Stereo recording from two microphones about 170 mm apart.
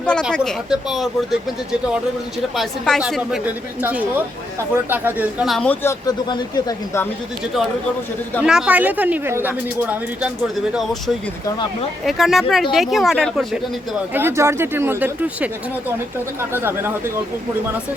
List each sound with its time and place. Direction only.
0.0 s a woman's voice: 5° left (ahead or behind)
2.6 s a woman's voice: centre (ahead or behind)
5.5 s a woman's voice: centre (ahead or behind)
5.8 s speech: 20° left (ahead or behind)
8.4 s a woman's voice: 5° right (ahead or behind)
14.1 s speech: 15° right (ahead or behind)